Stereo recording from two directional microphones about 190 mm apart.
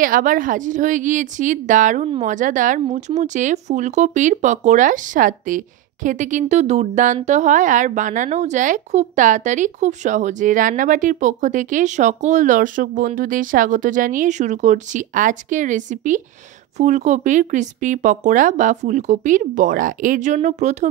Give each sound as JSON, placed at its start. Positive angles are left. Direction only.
{"t": 0.0, "sound": "a woman's voice", "side_deg": -45}